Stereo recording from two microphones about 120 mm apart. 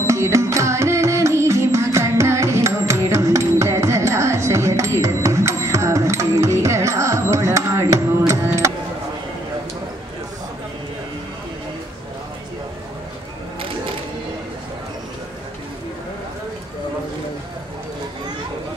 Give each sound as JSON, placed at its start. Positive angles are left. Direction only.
{"t": 0.0, "sound": "music", "side_deg": -25}